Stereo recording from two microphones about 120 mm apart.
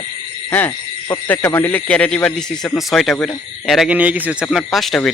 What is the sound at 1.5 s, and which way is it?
Speech, 20° left (ahead or behind).